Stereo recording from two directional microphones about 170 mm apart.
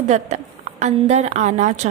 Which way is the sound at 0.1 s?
40° right (ahead or behind).